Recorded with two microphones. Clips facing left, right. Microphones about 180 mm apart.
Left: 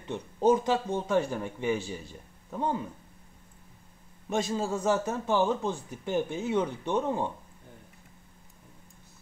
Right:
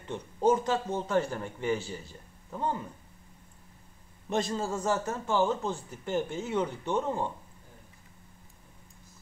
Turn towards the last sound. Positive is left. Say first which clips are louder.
# left 1 dB
turn(degrees=15)  # may be behind; listen again after turning